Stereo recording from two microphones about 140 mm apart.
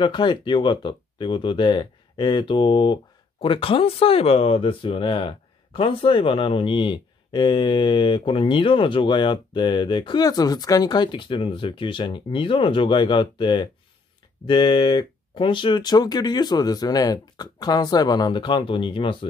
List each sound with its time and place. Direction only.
0.0 s speech: 35° left (ahead or behind)